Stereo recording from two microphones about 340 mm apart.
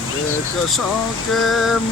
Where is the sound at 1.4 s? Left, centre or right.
Centre.